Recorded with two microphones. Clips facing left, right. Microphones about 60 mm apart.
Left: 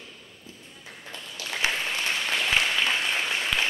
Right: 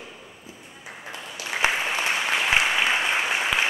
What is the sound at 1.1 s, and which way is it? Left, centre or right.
Applause, centre.